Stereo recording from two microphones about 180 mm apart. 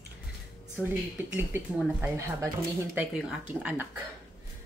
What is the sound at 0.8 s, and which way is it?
Speech, 10° right (ahead or behind).